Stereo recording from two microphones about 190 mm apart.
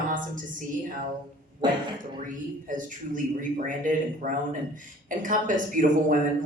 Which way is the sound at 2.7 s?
45° right (ahead or behind).